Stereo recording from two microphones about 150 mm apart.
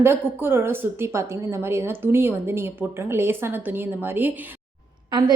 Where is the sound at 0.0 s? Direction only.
15° right (ahead or behind).